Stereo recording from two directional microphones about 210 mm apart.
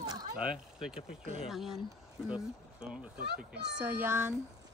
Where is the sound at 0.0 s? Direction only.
20° right (ahead or behind).